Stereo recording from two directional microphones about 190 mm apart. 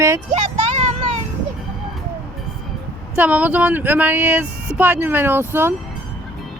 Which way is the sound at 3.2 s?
5° right (ahead or behind).